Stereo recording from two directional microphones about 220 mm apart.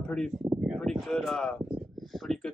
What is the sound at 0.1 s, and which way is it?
Speech, 5° left (ahead or behind).